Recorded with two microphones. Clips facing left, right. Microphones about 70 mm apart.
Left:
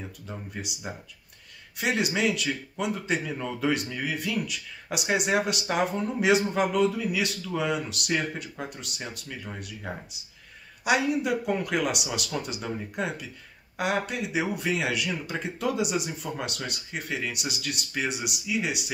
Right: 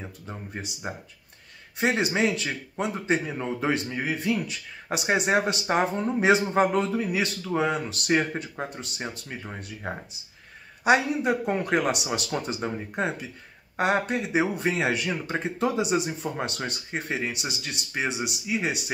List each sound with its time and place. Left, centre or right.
0.3 s speech: right